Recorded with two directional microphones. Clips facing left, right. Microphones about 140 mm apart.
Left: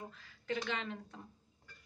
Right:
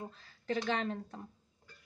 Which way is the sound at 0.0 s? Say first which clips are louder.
Right 4 dB; 30° right (ahead or behind).